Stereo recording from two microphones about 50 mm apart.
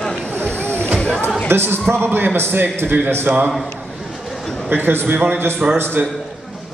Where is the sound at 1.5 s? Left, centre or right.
Right.